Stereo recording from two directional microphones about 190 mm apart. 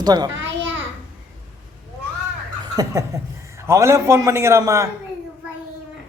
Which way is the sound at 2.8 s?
15° right (ahead or behind).